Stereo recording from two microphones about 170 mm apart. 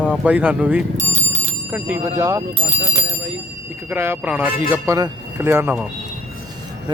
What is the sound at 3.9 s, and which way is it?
Speech, 10° right (ahead or behind).